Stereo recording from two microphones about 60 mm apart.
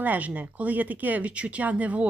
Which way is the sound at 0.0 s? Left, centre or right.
Right.